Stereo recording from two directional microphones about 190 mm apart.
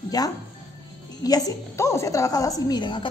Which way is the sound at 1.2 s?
20° left (ahead or behind).